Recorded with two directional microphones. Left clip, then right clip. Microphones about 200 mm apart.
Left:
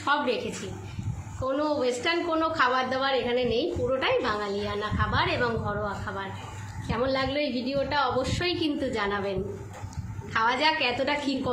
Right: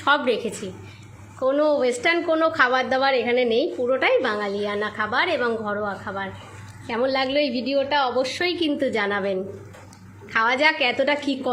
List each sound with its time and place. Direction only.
0.0 s a woman's voice: 40° right (ahead or behind)
10.3 s a woman's voice: 30° right (ahead or behind)